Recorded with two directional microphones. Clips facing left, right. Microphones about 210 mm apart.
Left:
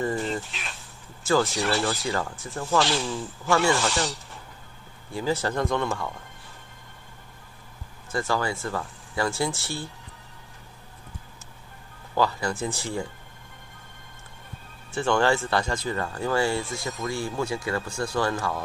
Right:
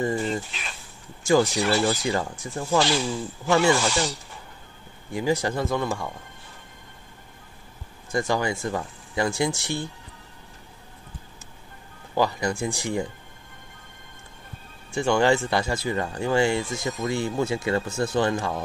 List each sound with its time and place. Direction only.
0.1 s speech: centre (ahead or behind)
2.0 s speech: 15° right (ahead or behind)
2.8 s speech: centre (ahead or behind)
5.1 s speech: 15° right (ahead or behind)
8.1 s speech: 15° right (ahead or behind)
12.2 s speech: 15° right (ahead or behind)
14.9 s speech: 15° right (ahead or behind)